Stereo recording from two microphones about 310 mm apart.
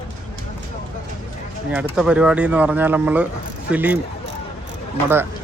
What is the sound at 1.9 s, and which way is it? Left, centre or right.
Speech, centre.